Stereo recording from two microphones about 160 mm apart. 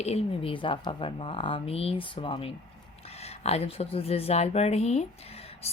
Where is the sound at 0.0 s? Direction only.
40° left (ahead or behind).